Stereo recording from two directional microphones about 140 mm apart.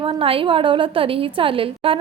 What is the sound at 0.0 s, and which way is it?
A woman's voice, 40° right (ahead or behind).